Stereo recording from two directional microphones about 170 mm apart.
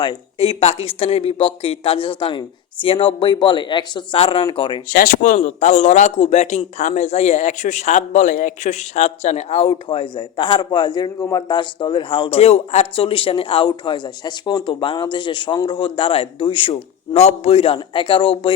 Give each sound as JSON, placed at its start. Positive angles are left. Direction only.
{"t": 0.0, "sound": "a man's voice", "side_deg": 30}
{"t": 4.9, "sound": "a man's voice", "side_deg": 55}